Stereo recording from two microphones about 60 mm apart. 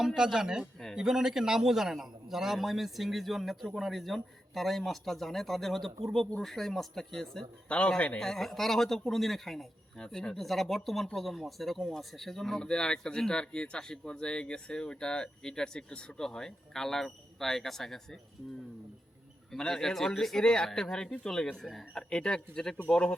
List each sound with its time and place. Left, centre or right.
0.0 s a man's voice: centre
7.7 s speech: centre
8.2 s a man's voice: centre
19.5 s speech: centre